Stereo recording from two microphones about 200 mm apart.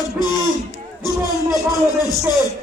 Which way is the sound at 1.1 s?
20° left (ahead or behind).